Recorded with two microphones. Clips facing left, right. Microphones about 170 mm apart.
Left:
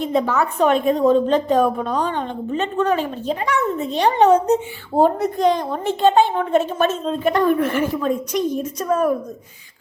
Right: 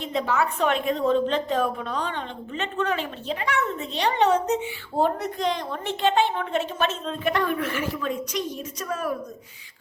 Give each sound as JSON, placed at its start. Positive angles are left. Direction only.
{"t": 0.0, "sound": "a woman's voice", "side_deg": 45}